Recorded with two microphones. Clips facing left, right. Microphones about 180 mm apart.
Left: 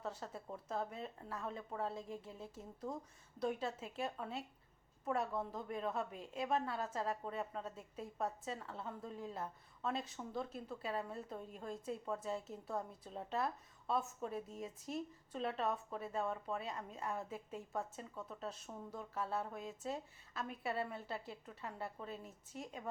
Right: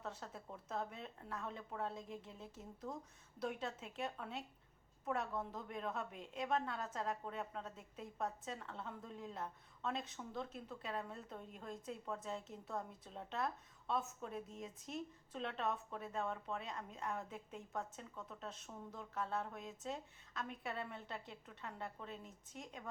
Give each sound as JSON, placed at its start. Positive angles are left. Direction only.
{"t": 0.0, "sound": "a woman's voice", "side_deg": 0}